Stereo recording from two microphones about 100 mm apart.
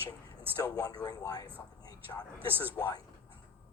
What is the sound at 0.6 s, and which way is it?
Speech, 40° left (ahead or behind).